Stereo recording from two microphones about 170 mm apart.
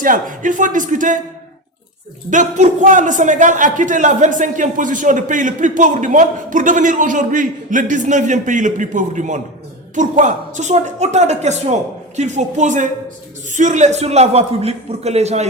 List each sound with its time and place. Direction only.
0.0 s a man's voice: 50° right (ahead or behind)
2.3 s a man's voice: 45° right (ahead or behind)